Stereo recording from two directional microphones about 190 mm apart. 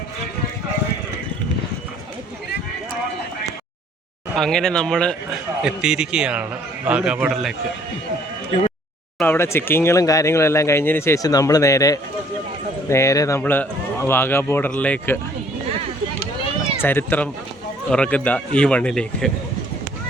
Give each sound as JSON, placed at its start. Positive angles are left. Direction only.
{"t": 4.4, "sound": "speech", "side_deg": 5}
{"t": 9.1, "sound": "speech", "side_deg": 10}
{"t": 16.8, "sound": "speech", "side_deg": 10}